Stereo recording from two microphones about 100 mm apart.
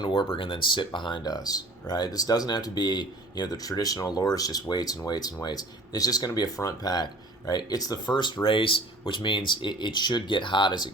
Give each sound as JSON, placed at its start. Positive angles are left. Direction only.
{"t": 0.0, "sound": "speech", "side_deg": 55}
{"t": 8.4, "sound": "speech", "side_deg": 60}